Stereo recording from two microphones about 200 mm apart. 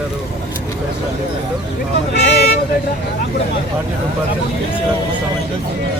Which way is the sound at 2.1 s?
55° left (ahead or behind).